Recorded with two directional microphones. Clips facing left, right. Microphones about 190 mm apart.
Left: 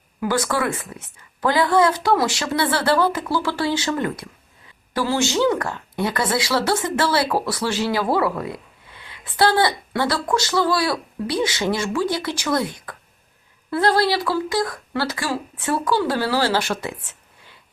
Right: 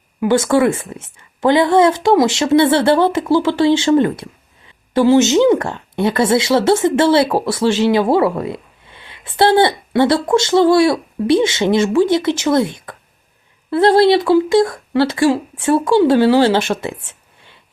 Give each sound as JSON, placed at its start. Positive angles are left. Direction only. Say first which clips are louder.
{"t": 0.2, "sound": "a woman's voice", "louder": "right 9 dB", "side_deg": -25}